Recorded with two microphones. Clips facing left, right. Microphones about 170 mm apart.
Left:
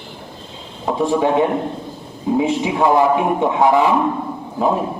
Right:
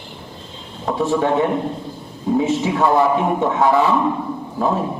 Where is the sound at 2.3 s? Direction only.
15° left (ahead or behind).